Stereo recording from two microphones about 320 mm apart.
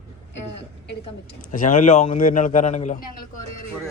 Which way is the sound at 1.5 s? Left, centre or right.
Left.